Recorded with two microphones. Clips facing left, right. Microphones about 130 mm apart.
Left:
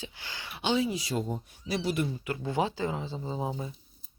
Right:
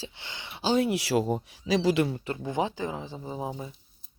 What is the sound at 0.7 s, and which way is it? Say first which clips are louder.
Speech: right 6 dB; 65° right (ahead or behind).